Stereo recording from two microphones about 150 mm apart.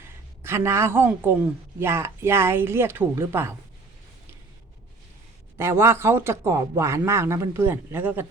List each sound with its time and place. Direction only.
0.0 s a woman's voice: 15° right (ahead or behind)
5.5 s a woman's voice: 15° right (ahead or behind)